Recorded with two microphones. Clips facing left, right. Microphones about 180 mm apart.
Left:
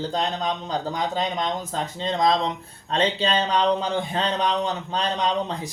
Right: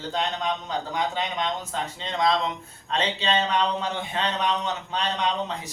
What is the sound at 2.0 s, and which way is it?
Speech, 35° left (ahead or behind).